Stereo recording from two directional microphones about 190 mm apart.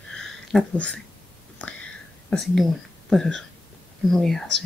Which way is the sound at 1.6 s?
5° left (ahead or behind).